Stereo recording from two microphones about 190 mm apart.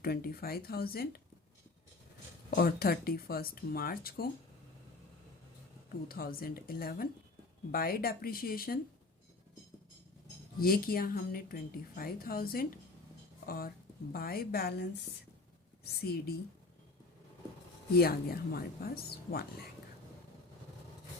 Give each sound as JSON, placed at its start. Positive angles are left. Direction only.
{"t": 0.0, "sound": "a woman's voice", "side_deg": 55}
{"t": 2.6, "sound": "a woman's voice", "side_deg": 55}
{"t": 6.1, "sound": "a woman's voice", "side_deg": 50}
{"t": 10.6, "sound": "a woman's voice", "side_deg": 50}
{"t": 17.9, "sound": "a woman's voice", "side_deg": 55}